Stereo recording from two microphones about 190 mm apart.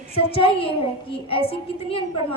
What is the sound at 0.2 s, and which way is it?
A woman's voice, 30° left (ahead or behind).